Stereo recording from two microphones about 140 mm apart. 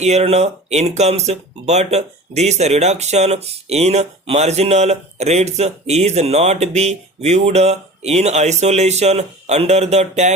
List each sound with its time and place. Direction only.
0.0 s speech: 50° right (ahead or behind)